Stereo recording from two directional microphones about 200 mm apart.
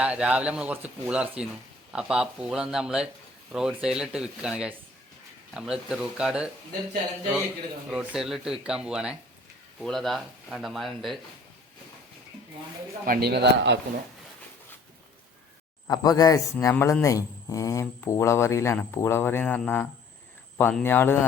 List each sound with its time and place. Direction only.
0.0 s speech: 5° right (ahead or behind)
7.9 s speech: centre (ahead or behind)
13.1 s speech: 50° right (ahead or behind)
15.9 s speech: 20° left (ahead or behind)